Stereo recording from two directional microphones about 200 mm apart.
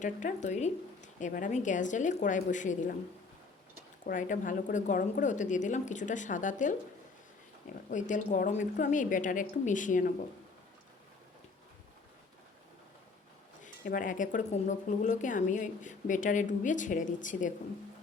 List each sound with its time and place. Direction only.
0.0 s speech: 40° left (ahead or behind)
4.0 s speech: 40° left (ahead or behind)
7.9 s speech: 40° left (ahead or behind)
13.6 s speech: 40° left (ahead or behind)